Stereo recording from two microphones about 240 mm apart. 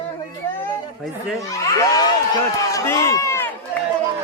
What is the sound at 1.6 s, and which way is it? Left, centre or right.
Speech, centre.